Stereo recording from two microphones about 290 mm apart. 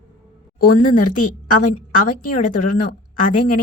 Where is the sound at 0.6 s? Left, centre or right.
Left.